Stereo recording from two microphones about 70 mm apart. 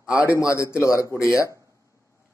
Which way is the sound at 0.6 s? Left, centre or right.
Left.